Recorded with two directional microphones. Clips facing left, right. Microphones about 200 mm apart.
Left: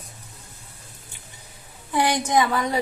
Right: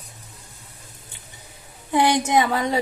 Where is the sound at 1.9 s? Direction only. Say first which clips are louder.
Right 3 dB; 25° right (ahead or behind).